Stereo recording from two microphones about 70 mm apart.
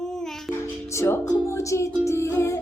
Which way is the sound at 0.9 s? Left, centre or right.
Left.